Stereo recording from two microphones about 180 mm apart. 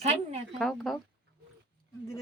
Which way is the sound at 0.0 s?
35° right (ahead or behind).